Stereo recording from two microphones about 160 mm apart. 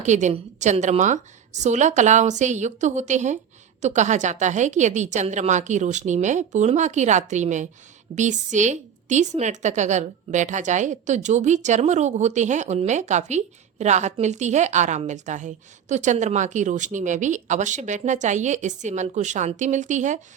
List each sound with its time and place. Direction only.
0.0 s a woman's voice: 45° right (ahead or behind)